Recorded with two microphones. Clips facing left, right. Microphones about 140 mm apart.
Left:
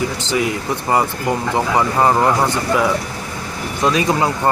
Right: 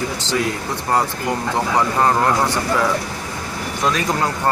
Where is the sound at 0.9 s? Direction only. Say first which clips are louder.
Left 2 dB; 10° left (ahead or behind).